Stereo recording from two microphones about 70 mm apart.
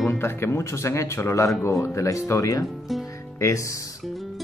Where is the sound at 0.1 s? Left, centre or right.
Left.